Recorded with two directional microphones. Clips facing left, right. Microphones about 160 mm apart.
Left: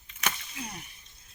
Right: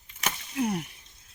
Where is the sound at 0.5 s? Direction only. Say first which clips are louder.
Right 13 dB; 55° right (ahead or behind).